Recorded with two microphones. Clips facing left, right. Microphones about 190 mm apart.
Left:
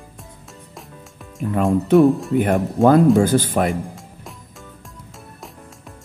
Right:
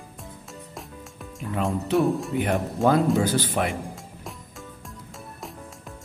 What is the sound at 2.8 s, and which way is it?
Speech, 50° left (ahead or behind).